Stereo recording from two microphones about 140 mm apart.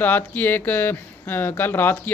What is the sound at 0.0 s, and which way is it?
Speech, 15° left (ahead or behind).